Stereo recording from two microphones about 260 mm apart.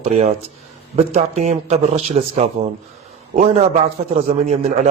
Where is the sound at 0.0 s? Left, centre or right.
Right.